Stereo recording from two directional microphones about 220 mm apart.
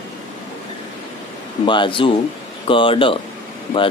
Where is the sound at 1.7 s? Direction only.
20° left (ahead or behind).